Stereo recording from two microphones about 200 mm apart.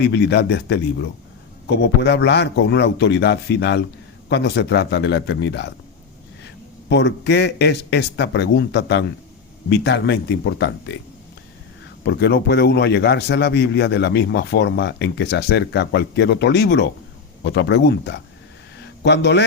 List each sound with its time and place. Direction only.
0.0 s a man's voice: 55° left (ahead or behind)
12.0 s a man's voice: 55° left (ahead or behind)